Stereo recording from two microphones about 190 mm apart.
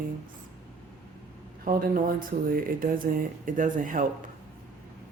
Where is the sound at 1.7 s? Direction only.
45° right (ahead or behind).